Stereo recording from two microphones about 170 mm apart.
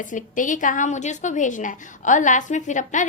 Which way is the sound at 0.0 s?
50° left (ahead or behind).